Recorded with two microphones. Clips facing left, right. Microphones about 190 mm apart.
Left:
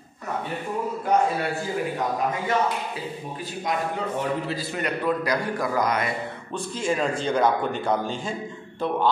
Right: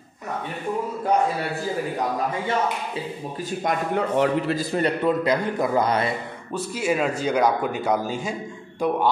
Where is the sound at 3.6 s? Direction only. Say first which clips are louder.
Right 3 dB; 60° right (ahead or behind).